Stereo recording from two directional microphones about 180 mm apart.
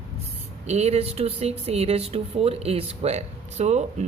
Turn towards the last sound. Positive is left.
turn(degrees=-40)  # may be behind; listen again after turning